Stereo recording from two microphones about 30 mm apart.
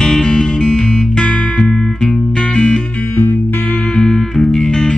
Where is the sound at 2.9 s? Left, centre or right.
Left.